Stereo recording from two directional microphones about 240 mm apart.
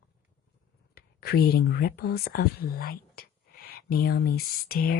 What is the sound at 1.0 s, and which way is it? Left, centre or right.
Speech, left.